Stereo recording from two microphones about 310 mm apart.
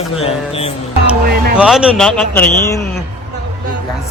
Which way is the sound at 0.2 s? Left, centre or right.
Centre.